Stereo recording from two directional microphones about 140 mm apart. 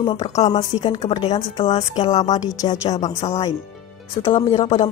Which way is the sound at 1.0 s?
45° left (ahead or behind).